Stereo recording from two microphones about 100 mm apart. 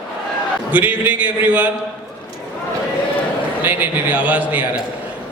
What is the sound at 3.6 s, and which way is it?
A man's voice, 20° right (ahead or behind).